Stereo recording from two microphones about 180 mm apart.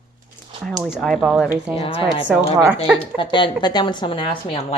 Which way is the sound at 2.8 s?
5° right (ahead or behind).